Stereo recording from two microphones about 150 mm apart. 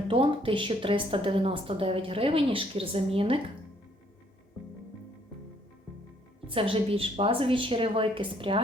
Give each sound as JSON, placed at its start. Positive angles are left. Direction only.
{"t": 0.1, "sound": "a woman's voice", "side_deg": -35}
{"t": 6.5, "sound": "a woman's voice", "side_deg": -35}